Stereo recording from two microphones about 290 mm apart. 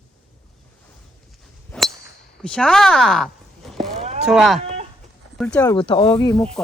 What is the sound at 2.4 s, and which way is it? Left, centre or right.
Speech, centre.